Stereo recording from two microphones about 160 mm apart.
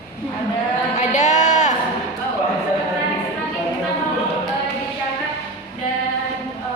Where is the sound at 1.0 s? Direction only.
50° left (ahead or behind).